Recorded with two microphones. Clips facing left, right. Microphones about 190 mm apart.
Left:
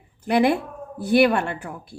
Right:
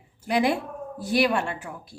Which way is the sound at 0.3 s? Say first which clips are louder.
Left 4 dB; 60° left (ahead or behind).